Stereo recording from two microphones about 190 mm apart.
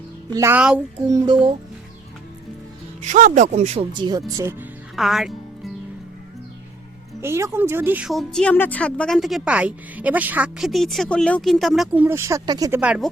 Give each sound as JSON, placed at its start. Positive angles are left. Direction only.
{"t": 0.3, "sound": "speech", "side_deg": -15}
{"t": 1.1, "sound": "speech", "side_deg": -20}
{"t": 3.0, "sound": "speech", "side_deg": -40}
{"t": 3.9, "sound": "speech", "side_deg": -25}
{"t": 4.3, "sound": "music", "side_deg": -15}
{"t": 7.2, "sound": "speech", "side_deg": -15}
{"t": 12.8, "sound": "speech", "side_deg": -5}